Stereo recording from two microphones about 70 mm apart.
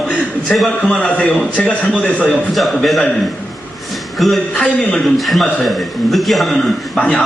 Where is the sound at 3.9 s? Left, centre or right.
Centre.